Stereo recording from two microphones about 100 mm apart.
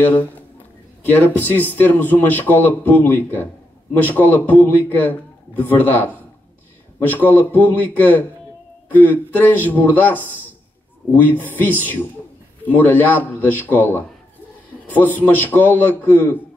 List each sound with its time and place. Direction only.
1.1 s a man's voice: 20° left (ahead or behind)